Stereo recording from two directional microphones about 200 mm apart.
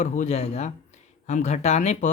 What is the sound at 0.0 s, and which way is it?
Speech, 35° left (ahead or behind).